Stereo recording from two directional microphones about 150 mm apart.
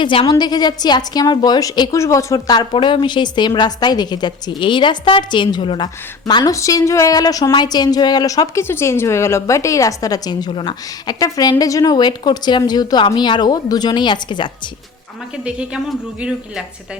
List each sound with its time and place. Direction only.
0.0 s a woman's voice: 35° left (ahead or behind)
15.4 s speech: 5° right (ahead or behind)